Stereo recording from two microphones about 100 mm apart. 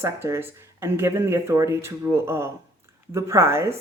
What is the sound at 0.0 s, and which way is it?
Speech, 25° right (ahead or behind).